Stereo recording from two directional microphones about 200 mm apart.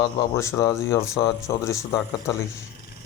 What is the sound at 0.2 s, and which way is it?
Speech, 15° left (ahead or behind).